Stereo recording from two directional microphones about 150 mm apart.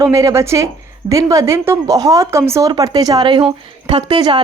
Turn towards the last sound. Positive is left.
turn(degrees=-30)  # may be behind; listen again after turning